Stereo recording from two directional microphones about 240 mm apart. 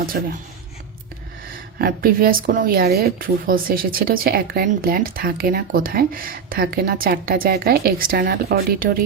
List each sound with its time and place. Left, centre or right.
0.1 s a woman's voice: right
1.8 s a woman's voice: right